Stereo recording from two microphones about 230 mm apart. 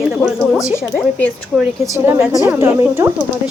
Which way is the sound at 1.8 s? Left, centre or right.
Centre.